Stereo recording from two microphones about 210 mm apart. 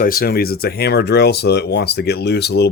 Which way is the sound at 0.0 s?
45° left (ahead or behind).